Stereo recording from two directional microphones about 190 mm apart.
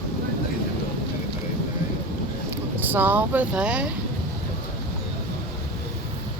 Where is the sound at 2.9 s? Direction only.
10° right (ahead or behind).